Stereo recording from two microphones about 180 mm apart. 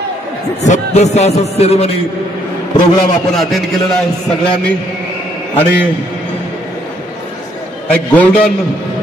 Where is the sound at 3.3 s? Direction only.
Centre (ahead or behind).